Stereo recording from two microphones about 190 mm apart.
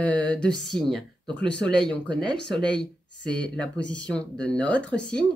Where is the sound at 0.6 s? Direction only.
Centre (ahead or behind).